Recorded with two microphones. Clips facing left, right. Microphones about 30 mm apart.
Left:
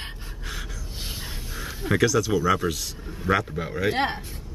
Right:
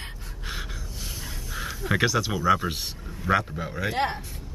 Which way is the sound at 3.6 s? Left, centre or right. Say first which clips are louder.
Left 4 dB; centre.